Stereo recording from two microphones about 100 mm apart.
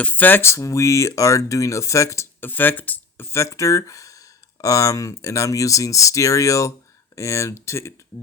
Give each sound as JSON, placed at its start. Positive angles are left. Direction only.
{"t": 0.0, "sound": "speech", "side_deg": 15}